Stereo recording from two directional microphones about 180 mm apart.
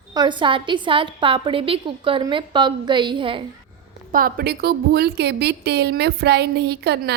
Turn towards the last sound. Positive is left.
turn(degrees=-65)  # may be behind; listen again after turning